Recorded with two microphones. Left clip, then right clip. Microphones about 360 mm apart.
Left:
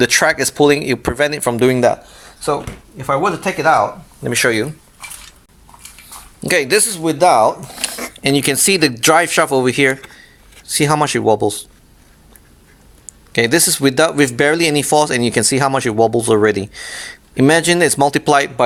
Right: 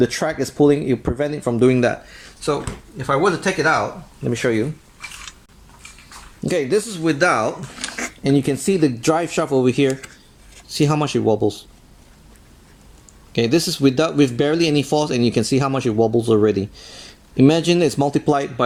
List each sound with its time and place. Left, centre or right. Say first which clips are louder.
0.0 s speech: left 7 dB; left
3.0 s speech: left 2 dB; centre
4.2 s speech: left 5 dB; left
6.5 s speech: left 5 dB; left
7.2 s speech: left 7 dB; left
8.2 s speech: left 4 dB; left
13.1 s speech: left 4 dB; left